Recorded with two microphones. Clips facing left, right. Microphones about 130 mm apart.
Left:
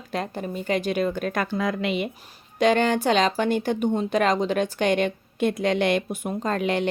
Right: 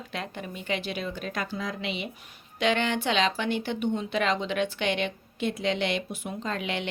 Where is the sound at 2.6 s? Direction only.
40° left (ahead or behind).